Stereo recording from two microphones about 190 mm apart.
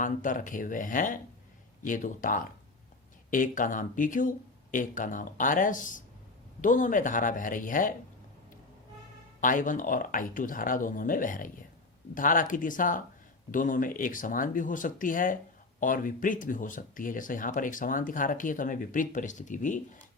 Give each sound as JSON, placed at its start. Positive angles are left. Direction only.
{"t": 0.0, "sound": "speech", "side_deg": 45}
{"t": 9.4, "sound": "speech", "side_deg": 45}